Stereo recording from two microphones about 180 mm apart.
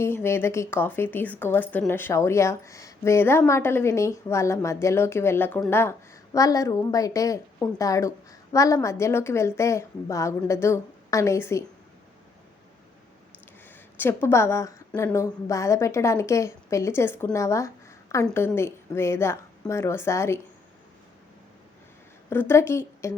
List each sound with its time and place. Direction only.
0.0 s a woman's voice: 15° left (ahead or behind)
13.9 s a woman's voice: 10° left (ahead or behind)
22.3 s a woman's voice: 15° left (ahead or behind)